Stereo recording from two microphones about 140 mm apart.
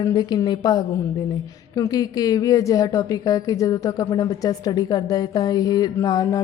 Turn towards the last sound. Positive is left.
turn(degrees=25)  # may be behind; listen again after turning